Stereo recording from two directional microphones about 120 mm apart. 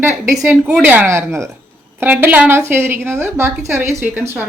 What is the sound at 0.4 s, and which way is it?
Speech, 10° right (ahead or behind).